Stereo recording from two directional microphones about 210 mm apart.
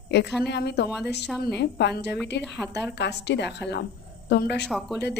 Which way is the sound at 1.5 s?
55° left (ahead or behind).